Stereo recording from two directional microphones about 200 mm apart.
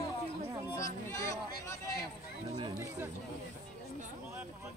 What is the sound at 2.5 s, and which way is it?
Speech, 20° right (ahead or behind).